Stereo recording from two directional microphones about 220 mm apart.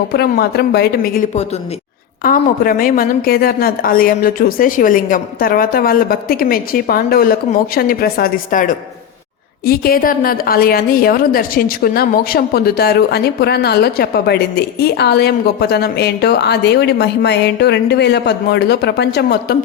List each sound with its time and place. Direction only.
0.1 s a woman's voice: 45° left (ahead or behind)